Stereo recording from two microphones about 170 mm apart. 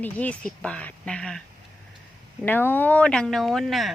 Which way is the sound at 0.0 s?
10° left (ahead or behind).